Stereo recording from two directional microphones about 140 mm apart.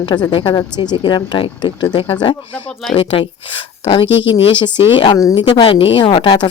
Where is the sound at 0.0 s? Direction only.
30° left (ahead or behind).